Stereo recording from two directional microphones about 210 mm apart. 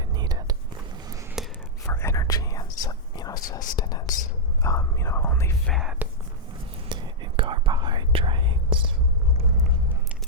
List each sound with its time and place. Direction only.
0.1 s whispering: 20° right (ahead or behind)
1.4 s whispering: centre (ahead or behind)
1.9 s whispering: 10° left (ahead or behind); by 6.1 s 5° right (ahead or behind)
6.8 s whispering: 20° right (ahead or behind)